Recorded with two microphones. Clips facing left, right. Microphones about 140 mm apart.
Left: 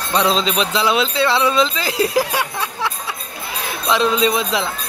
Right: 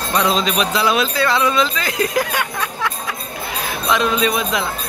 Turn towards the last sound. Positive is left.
turn(degrees=25)  # may be behind; listen again after turning